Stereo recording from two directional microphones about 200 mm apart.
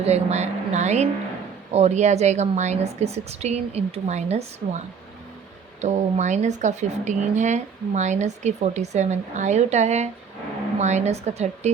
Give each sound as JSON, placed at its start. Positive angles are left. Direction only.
{"t": 0.0, "sound": "speech", "side_deg": -35}
{"t": 5.8, "sound": "speech", "side_deg": -35}